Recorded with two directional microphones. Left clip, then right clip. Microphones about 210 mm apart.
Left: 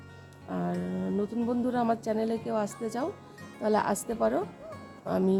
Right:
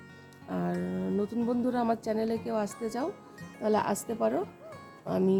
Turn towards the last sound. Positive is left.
turn(degrees=-5)  # may be behind; listen again after turning